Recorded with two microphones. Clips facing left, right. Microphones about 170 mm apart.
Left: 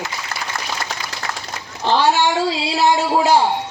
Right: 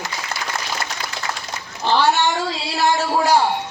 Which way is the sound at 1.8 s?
15° left (ahead or behind).